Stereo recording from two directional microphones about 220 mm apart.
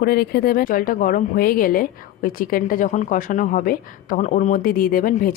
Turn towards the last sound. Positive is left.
turn(degrees=40)  # may be behind; listen again after turning